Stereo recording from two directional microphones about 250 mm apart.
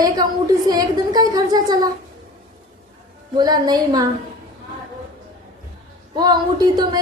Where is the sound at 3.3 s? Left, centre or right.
Centre.